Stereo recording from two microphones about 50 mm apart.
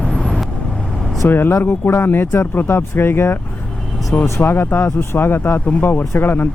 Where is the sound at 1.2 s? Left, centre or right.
Left.